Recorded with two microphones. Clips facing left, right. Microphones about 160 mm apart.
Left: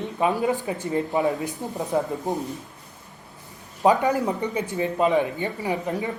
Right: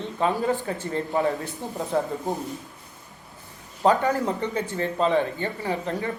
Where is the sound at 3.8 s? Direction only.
15° left (ahead or behind).